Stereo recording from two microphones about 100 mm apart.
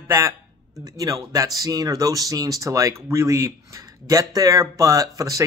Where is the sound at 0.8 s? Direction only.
35° right (ahead or behind).